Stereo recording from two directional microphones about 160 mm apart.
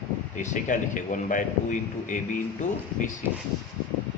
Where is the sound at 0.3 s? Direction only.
50° left (ahead or behind).